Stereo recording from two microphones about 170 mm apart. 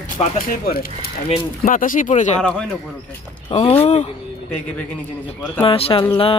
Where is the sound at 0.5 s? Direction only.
60° left (ahead or behind).